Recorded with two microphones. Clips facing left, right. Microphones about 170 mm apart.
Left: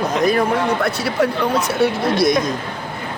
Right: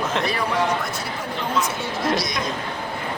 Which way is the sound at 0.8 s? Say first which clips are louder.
Left 11 dB; 75° left (ahead or behind).